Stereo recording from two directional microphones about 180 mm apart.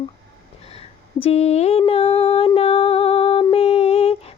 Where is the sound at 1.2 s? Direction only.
35° left (ahead or behind).